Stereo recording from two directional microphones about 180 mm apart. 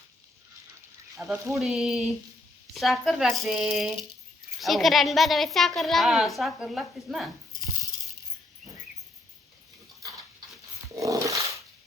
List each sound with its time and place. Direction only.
1.1 s a child's voice: centre (ahead or behind)
10.9 s dog: 20° right (ahead or behind)